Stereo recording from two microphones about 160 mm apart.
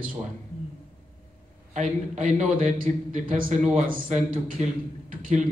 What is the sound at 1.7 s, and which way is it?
A man's voice, 45° right (ahead or behind).